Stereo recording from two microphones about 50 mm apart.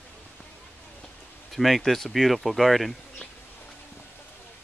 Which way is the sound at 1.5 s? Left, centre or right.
Centre.